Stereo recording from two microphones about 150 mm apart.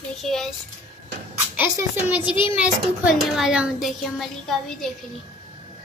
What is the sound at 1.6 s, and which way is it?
Speech, 10° right (ahead or behind).